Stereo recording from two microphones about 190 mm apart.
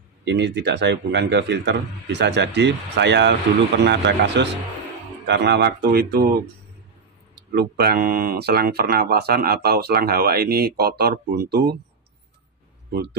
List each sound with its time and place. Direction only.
0.2 s a man's voice: 65° right (ahead or behind)
7.5 s a man's voice: 55° right (ahead or behind)